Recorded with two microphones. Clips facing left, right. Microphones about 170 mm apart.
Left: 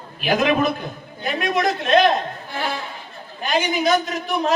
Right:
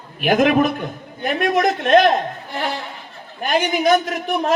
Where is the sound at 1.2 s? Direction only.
50° right (ahead or behind).